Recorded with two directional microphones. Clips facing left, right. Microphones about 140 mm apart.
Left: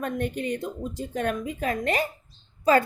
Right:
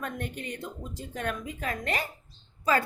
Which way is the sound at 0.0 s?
20° left (ahead or behind).